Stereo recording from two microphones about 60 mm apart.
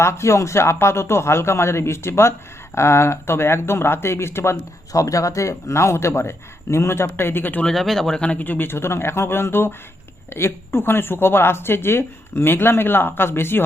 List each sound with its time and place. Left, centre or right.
0.0 s speech: left
4.9 s speech: left
7.6 s speech: centre
8.2 s speech: left